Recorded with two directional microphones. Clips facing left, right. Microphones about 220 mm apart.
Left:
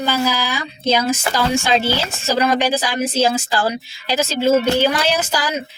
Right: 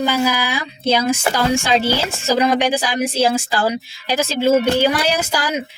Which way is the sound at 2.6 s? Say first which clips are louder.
Right 1 dB; 15° right (ahead or behind).